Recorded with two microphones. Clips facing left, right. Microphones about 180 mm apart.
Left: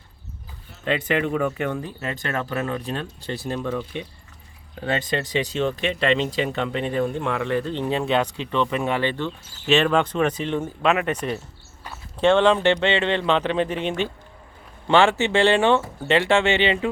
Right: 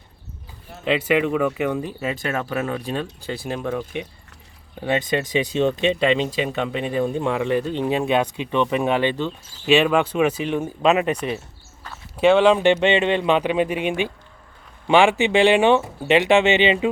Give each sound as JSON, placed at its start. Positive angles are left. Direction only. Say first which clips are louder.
{"t": 0.9, "sound": "speech", "louder": "right 3 dB", "side_deg": -10}